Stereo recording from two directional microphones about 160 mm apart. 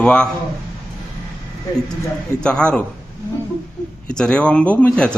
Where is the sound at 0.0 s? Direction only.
5° left (ahead or behind).